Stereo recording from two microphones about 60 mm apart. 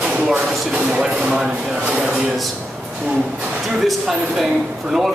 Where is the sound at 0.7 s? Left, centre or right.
Centre.